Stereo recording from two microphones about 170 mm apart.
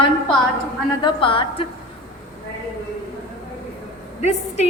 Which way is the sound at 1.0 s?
30° left (ahead or behind).